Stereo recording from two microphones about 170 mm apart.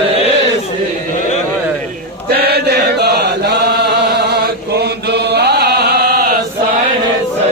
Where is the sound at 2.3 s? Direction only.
70° right (ahead or behind).